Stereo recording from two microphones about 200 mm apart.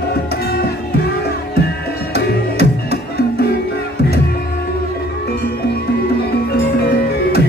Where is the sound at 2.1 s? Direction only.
55° left (ahead or behind).